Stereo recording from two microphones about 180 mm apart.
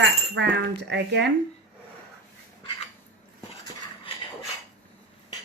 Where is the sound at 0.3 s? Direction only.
75° right (ahead or behind).